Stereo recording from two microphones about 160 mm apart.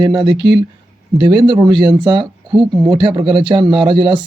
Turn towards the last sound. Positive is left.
turn(degrees=-30)  # may be behind; listen again after turning